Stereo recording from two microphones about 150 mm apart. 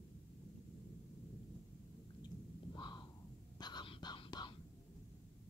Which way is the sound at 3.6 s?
30° left (ahead or behind).